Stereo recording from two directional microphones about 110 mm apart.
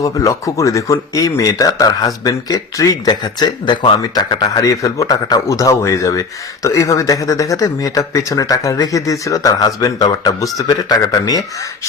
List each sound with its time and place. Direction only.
0.0 s speech: 30° left (ahead or behind)